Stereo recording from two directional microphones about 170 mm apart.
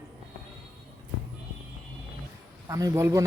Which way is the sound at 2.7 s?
20° right (ahead or behind).